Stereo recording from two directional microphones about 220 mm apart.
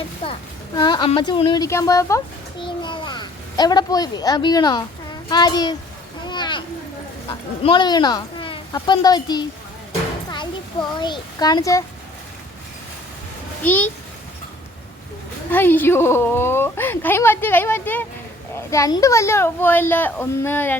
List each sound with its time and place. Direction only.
0.8 s a woman's voice: 20° left (ahead or behind)
6.2 s a sound: 20° left (ahead or behind)
7.6 s a woman's voice: 20° left (ahead or behind)
13.7 s a woman's voice: 10° left (ahead or behind)
15.4 s a woman's voice: 10° left (ahead or behind)